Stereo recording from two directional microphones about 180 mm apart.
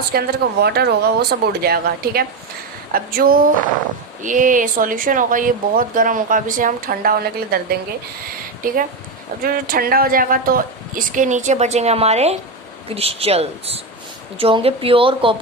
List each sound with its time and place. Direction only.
0.1 s speech: 60° right (ahead or behind); by 15.4 s 30° right (ahead or behind)